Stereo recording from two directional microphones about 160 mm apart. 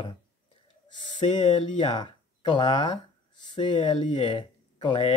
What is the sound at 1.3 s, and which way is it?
Speech, 30° left (ahead or behind).